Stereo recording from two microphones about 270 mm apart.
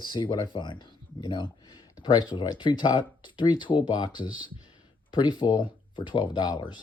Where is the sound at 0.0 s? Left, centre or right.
Centre.